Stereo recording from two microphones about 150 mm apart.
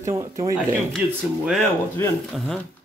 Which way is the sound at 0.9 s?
Centre (ahead or behind).